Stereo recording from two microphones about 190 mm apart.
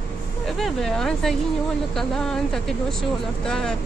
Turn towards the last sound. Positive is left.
turn(degrees=5)  # may be behind; listen again after turning